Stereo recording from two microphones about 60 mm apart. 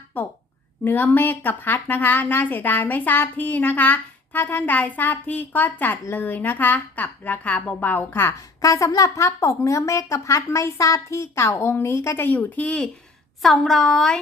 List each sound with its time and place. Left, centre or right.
0.1 s a woman's voice: left
8.3 s a woman's voice: left
11.5 s a woman's voice: left
13.4 s a woman's voice: centre